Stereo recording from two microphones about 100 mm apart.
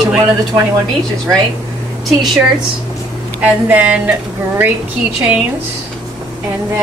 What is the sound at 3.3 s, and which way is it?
Speech, 15° right (ahead or behind).